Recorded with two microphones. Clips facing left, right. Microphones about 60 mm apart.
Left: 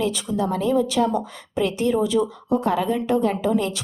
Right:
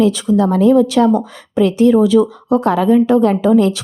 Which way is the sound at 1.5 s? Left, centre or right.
Right.